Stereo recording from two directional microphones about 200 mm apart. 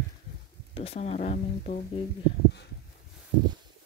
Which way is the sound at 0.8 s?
30° left (ahead or behind).